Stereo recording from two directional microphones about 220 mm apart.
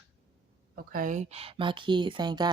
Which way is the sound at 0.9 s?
40° right (ahead or behind).